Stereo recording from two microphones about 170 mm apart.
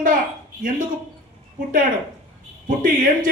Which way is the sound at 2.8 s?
55° right (ahead or behind).